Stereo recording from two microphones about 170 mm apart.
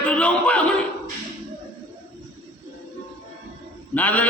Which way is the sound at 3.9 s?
10° left (ahead or behind).